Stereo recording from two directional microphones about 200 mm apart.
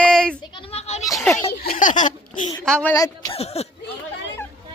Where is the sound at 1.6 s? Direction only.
40° left (ahead or behind).